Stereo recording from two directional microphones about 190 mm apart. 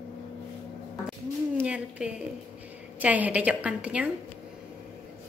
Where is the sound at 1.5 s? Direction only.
5° right (ahead or behind).